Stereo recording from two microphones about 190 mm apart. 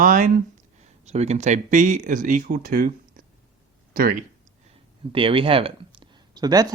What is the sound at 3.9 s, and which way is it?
Speech, 45° right (ahead or behind).